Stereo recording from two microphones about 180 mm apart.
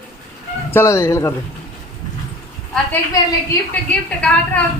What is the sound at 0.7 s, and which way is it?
Speech, 15° left (ahead or behind).